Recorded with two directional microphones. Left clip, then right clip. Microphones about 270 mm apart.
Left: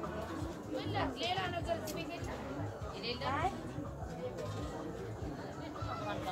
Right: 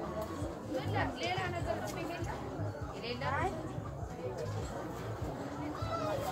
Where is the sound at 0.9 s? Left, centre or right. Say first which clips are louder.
Even; left.